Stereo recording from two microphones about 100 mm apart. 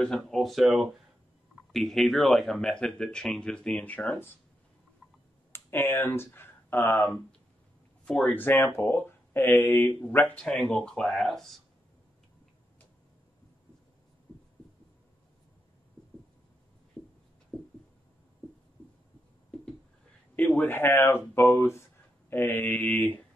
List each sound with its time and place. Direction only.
0.0 s speech: 5° left (ahead or behind)
5.5 s speech: 25° left (ahead or behind)
8.0 s speech: 10° left (ahead or behind)
8.4 s speech: 20° left (ahead or behind); by 11.5 s centre (ahead or behind)
17.5 s a sound: 10° left (ahead or behind)
20.5 s speech: 20° left (ahead or behind)